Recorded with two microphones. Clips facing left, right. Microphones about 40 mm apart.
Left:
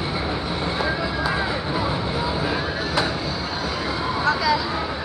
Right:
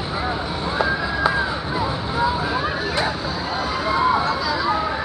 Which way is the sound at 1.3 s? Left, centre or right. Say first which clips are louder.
Right 1 dB; centre.